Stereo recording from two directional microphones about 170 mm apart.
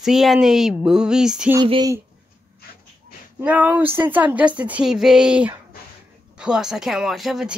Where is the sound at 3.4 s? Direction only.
10° right (ahead or behind).